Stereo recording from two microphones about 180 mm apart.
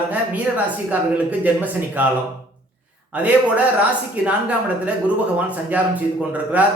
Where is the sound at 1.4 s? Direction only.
10° right (ahead or behind).